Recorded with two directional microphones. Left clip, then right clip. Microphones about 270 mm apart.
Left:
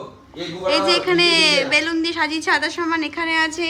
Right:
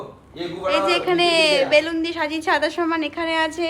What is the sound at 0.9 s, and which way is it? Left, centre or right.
A woman's voice, centre.